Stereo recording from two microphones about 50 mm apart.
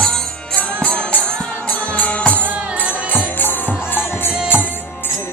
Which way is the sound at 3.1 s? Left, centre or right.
Left.